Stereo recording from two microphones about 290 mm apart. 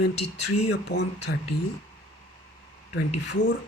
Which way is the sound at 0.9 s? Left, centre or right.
Left.